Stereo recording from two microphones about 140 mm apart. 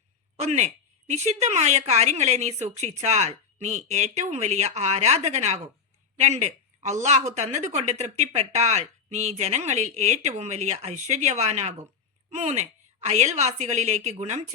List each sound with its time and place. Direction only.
0.3 s a woman's voice: 55° right (ahead or behind)